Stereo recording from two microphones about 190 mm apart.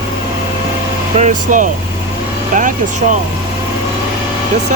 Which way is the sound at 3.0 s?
35° right (ahead or behind).